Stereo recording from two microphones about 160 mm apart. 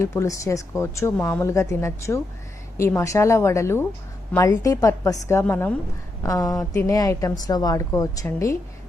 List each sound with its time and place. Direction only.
0.0 s a woman's voice: 20° left (ahead or behind)